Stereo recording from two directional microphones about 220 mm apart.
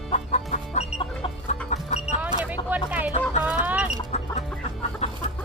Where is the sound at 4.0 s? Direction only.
30° left (ahead or behind).